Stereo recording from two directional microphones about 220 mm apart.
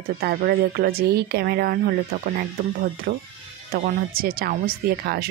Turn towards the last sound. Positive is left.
turn(degrees=-45)  # may be behind; listen again after turning